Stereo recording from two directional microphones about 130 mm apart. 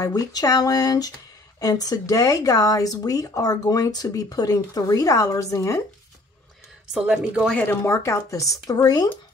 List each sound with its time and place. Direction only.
0.0 s speech: 30° left (ahead or behind)
6.9 s speech: 5° right (ahead or behind)
7.4 s speech: 15° left (ahead or behind); by 9.1 s 30° left (ahead or behind)